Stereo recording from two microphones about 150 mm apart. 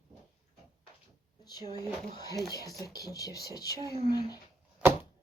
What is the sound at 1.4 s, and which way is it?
Speech, 25° left (ahead or behind).